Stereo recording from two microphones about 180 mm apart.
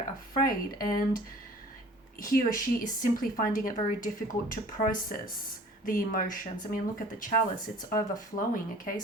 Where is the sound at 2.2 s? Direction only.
50° left (ahead or behind).